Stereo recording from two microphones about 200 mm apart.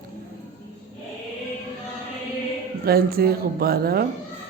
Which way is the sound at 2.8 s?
50° right (ahead or behind).